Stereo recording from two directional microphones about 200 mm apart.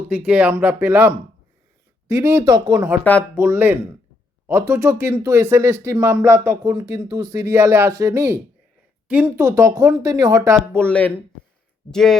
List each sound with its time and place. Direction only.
0.1 s speech: 5° right (ahead or behind)
3.0 s speech: 10° left (ahead or behind)
3.3 s speech: 10° right (ahead or behind)
10.8 s speech: 5° left (ahead or behind)